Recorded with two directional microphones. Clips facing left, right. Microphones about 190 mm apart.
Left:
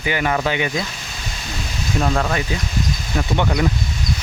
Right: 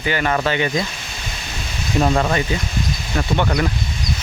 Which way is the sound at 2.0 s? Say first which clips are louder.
Right 3 dB; 5° right (ahead or behind).